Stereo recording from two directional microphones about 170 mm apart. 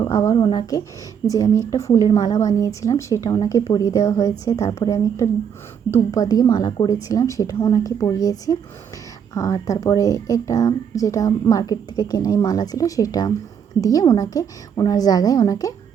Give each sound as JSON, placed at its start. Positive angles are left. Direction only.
{"t": 0.0, "sound": "speech", "side_deg": 15}
{"t": 2.3, "sound": "a woman's voice", "side_deg": 40}
{"t": 2.6, "sound": "speech", "side_deg": 20}